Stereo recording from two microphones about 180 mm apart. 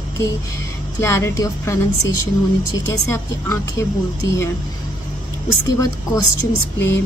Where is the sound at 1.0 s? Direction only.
15° left (ahead or behind).